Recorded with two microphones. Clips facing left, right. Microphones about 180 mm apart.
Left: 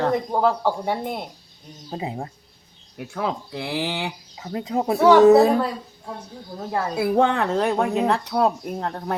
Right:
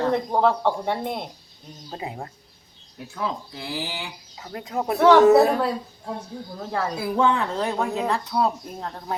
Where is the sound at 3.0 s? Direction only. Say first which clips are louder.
Left 3 dB; 65° left (ahead or behind).